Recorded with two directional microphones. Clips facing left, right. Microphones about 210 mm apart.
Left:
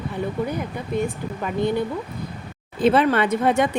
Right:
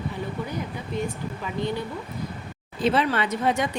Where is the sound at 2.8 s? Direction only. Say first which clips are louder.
Left 5 dB; 55° left (ahead or behind).